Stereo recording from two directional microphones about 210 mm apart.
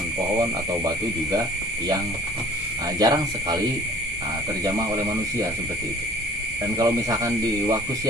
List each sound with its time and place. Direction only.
3.0 s speech: 20° right (ahead or behind)
6.7 s speech: 15° right (ahead or behind)